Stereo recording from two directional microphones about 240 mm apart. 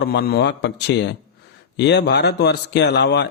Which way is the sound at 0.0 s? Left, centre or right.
Left.